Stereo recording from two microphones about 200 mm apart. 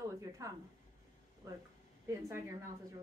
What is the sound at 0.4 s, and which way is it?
Speech, 15° right (ahead or behind).